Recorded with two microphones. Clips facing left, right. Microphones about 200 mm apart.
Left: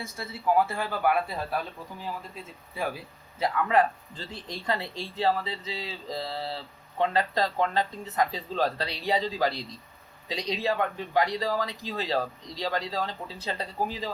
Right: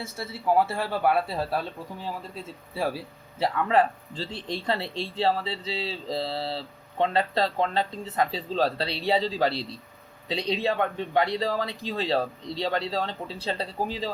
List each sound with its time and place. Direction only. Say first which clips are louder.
0.0 s speech: right 1 dB; 30° right (ahead or behind)